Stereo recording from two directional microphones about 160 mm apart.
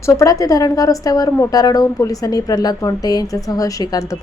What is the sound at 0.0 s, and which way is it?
A woman's voice, 20° left (ahead or behind).